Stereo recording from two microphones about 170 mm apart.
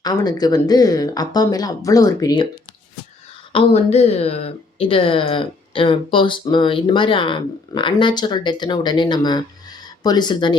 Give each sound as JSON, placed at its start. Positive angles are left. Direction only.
{"t": 0.0, "sound": "speech", "side_deg": 25}
{"t": 3.5, "sound": "speech", "side_deg": 35}